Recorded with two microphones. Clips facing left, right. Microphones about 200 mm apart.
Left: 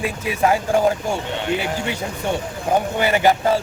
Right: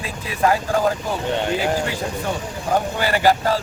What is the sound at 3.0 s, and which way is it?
Speech, 20° left (ahead or behind).